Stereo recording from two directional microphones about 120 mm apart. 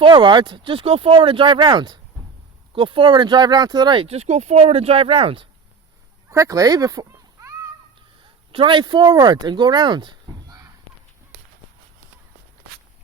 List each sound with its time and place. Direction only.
0.0 s speech: 40° right (ahead or behind)
4.0 s speech: 60° right (ahead or behind)
6.3 s speech: 25° right (ahead or behind)
7.3 s children playing: 25° right (ahead or behind)
8.5 s speech: 40° right (ahead or behind)